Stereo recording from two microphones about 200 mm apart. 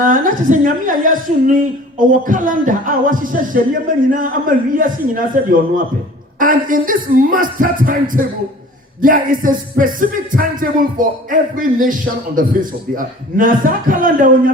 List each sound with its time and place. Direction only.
0.0 s a woman's voice: 40° right (ahead or behind)